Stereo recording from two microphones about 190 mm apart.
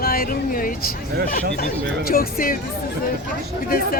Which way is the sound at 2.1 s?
50° left (ahead or behind).